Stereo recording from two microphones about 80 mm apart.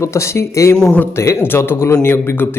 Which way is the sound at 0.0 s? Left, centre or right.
Left.